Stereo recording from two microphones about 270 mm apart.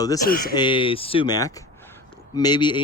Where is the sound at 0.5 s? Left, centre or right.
Centre.